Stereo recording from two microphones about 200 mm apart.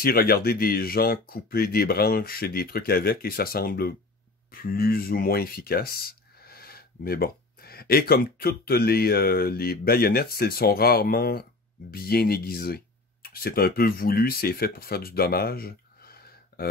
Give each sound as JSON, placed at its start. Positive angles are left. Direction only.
{"t": 0.0, "sound": "speech", "side_deg": 50}